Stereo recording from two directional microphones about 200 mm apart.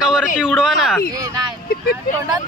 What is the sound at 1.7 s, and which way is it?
Vehicle, 50° left (ahead or behind).